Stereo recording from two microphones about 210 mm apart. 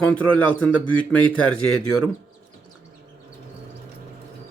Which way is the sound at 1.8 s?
90° left.